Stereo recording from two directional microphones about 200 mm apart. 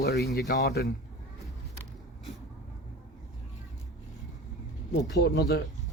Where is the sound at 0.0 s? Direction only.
55° left (ahead or behind).